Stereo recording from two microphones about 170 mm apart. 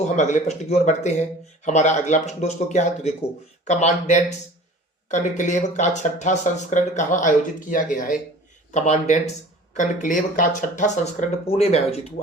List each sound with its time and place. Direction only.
0.0 s speech: 45° left (ahead or behind)